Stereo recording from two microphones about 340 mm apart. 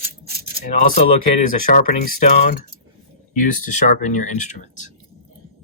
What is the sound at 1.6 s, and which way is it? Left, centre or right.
Speech, left.